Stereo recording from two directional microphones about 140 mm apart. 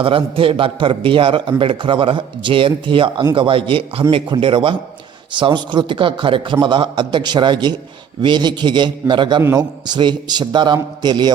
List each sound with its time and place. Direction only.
0.0 s a man's voice: 40° right (ahead or behind)